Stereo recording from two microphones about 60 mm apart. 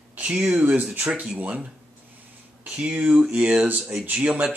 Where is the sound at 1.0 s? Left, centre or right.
Centre.